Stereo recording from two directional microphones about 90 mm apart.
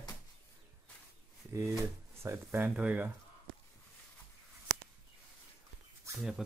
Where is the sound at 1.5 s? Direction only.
30° right (ahead or behind).